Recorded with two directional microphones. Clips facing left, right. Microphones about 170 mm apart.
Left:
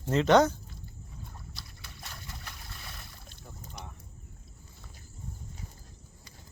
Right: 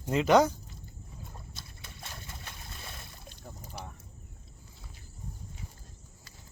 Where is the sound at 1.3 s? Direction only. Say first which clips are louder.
Even; 20° right (ahead or behind).